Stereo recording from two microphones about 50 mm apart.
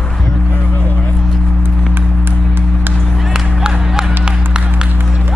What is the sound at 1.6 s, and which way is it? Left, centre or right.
Music, right.